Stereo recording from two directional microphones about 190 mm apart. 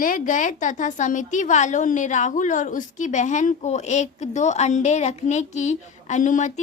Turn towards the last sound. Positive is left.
turn(degrees=40)  # may be behind; listen again after turning